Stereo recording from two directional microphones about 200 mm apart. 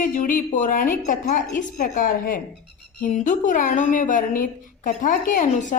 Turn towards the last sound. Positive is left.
turn(degrees=45)  # may be behind; listen again after turning